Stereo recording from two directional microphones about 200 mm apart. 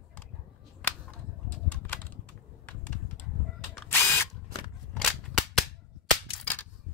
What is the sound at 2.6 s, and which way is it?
Typing, 5° left (ahead or behind).